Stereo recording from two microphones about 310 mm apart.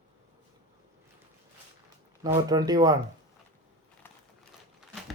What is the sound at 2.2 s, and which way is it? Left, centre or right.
Speech, centre.